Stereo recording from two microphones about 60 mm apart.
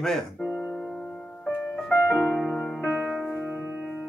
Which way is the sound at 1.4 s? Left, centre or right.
Left.